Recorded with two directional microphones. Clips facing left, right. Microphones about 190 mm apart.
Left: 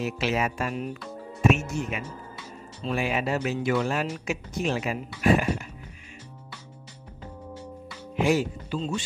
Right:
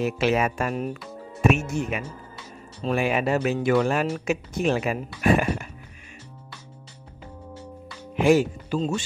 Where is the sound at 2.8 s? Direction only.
55° right (ahead or behind).